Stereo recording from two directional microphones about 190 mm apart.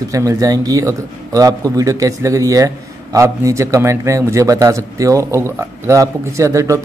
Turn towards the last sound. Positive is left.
turn(degrees=-15)  # may be behind; listen again after turning